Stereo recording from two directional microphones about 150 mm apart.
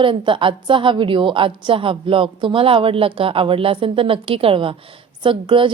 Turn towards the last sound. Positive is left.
turn(degrees=-35)  # may be behind; listen again after turning